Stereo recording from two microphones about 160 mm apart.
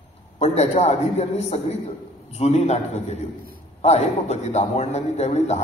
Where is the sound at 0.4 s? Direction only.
40° left (ahead or behind).